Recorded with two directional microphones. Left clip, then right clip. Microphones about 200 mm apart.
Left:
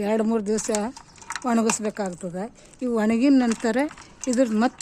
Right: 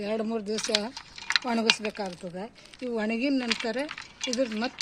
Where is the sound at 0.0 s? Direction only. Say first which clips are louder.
Left 7 dB; 25° left (ahead or behind).